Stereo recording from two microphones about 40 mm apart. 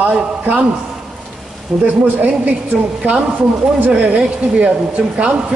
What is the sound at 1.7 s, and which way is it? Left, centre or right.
Speech, right.